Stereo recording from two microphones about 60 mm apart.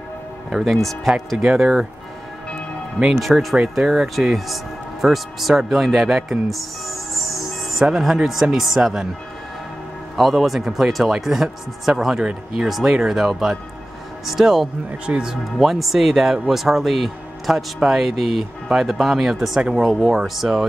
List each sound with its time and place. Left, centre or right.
0.5 s speech: centre
3.2 s speech: centre
10.1 s speech: centre
15.0 s speech: centre
15.6 s speech: centre